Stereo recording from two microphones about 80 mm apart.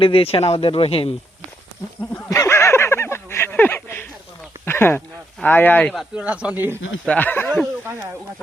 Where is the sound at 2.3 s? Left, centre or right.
Left.